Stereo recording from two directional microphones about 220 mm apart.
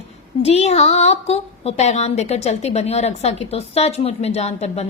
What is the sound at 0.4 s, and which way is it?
A woman's voice, 30° left (ahead or behind).